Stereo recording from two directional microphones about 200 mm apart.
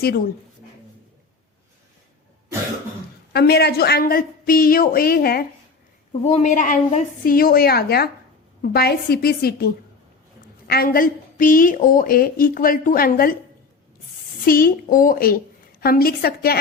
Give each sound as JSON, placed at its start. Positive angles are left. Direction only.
{"t": 3.3, "sound": "a woman's voice", "side_deg": 55}
{"t": 6.2, "sound": "a woman's voice", "side_deg": 35}
{"t": 14.4, "sound": "a woman's voice", "side_deg": 45}